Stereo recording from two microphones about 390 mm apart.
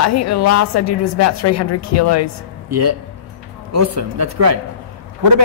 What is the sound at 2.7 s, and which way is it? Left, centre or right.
A man's voice, right.